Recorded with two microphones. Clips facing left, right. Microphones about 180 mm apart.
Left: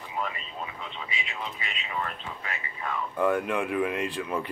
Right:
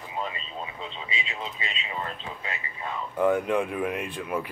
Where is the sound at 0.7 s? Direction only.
25° right (ahead or behind).